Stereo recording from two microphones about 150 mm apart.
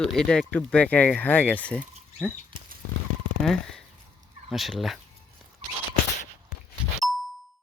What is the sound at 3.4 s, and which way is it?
Speech, 5° left (ahead or behind).